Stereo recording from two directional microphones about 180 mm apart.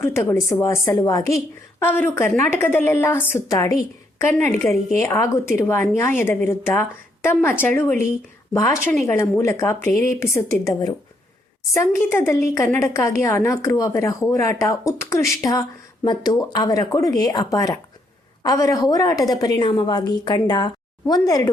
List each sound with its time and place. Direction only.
0.0 s a woman's voice: 15° left (ahead or behind)